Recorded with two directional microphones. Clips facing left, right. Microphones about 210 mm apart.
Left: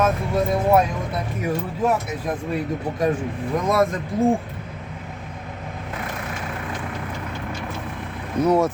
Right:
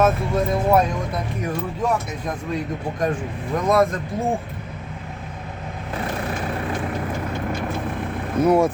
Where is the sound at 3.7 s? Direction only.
Centre (ahead or behind).